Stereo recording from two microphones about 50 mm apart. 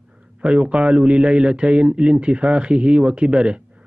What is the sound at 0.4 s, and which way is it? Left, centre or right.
A man's voice, right.